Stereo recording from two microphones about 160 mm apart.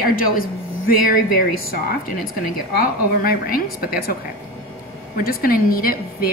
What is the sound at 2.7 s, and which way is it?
A woman's voice, 70° left (ahead or behind).